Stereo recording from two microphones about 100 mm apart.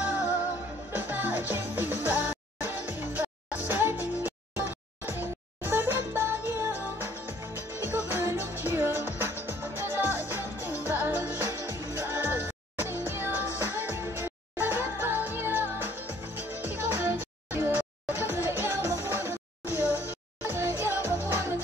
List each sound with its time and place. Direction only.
0.0 s music: 15° right (ahead or behind)